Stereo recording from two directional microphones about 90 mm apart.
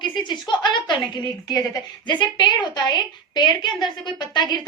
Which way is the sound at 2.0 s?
60° left (ahead or behind).